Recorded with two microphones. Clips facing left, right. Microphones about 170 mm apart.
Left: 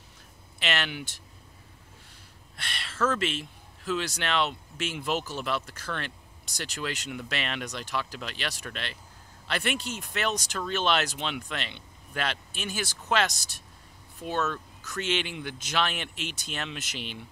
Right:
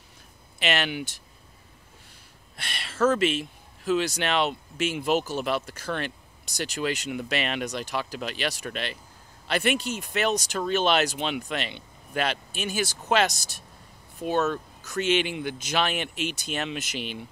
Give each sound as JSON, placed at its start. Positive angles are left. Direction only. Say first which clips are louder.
{"t": 0.6, "sound": "speech", "louder": "right 4 dB", "side_deg": -10}
{"t": 2.5, "sound": "speech", "louder": "right 2 dB", "side_deg": -10}
{"t": 10.6, "sound": "speech", "louder": "right 5 dB", "side_deg": -25}
{"t": 10.9, "sound": "speech", "louder": "right 4 dB", "side_deg": -10}
{"t": 14.2, "sound": "speech", "louder": "right 5 dB", "side_deg": -15}